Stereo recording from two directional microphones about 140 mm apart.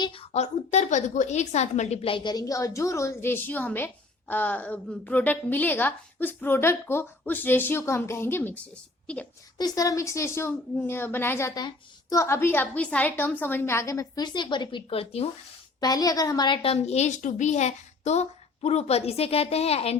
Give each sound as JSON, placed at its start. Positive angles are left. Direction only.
{"t": 0.0, "sound": "a woman's voice", "side_deg": 40}
{"t": 9.6, "sound": "a woman's voice", "side_deg": 25}
{"t": 15.8, "sound": "a woman's voice", "side_deg": 25}
{"t": 16.6, "sound": "a woman's voice", "side_deg": 45}